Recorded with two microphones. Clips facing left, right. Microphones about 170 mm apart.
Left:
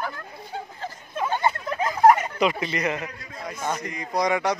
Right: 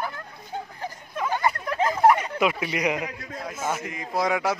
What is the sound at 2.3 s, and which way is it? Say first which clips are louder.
Speech: left 1 dB; 5° right (ahead or behind).